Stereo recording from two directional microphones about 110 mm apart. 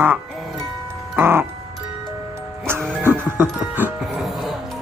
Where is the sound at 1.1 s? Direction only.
20° right (ahead or behind).